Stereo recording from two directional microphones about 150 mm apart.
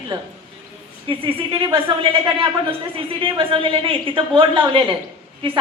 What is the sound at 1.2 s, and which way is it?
Speech, 35° right (ahead or behind).